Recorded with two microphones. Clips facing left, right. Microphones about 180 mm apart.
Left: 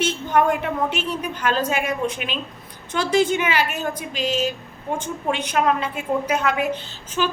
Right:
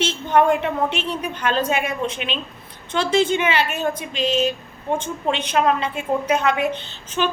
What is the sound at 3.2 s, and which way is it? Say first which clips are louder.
A woman's voice: right 1 dB; 10° left (ahead or behind).